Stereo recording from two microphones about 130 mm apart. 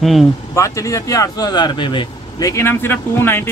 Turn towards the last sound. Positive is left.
turn(degrees=20)  # may be behind; listen again after turning